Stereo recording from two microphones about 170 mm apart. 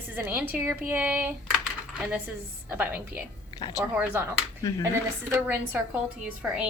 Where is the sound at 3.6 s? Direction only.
25° left (ahead or behind).